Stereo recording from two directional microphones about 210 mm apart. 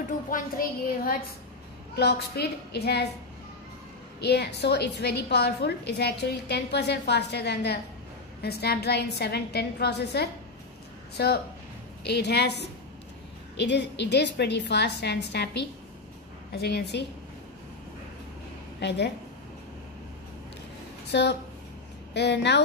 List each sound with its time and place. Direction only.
0.3 s a woman's voice: 45° left (ahead or behind)
4.2 s a woman's voice: 50° left (ahead or behind)
18.8 s a woman's voice: 55° left (ahead or behind)
21.1 s a woman's voice: 55° left (ahead or behind)